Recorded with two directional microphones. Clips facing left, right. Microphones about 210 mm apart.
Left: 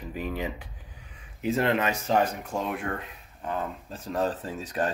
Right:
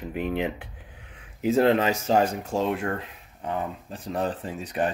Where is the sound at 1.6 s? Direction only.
30° right (ahead or behind).